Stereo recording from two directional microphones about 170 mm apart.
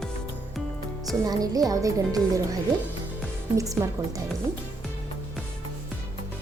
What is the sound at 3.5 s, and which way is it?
Speech, 20° right (ahead or behind).